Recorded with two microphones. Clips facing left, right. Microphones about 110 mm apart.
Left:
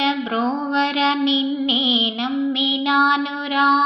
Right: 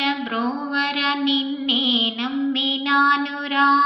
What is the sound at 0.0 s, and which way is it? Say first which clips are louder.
Female singing: left 3 dB; 20° left (ahead or behind).